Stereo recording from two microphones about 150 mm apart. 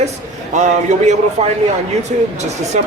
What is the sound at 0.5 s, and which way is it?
Speech, 50° right (ahead or behind).